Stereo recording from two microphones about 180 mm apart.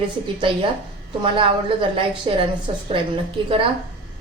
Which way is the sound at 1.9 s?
30° right (ahead or behind).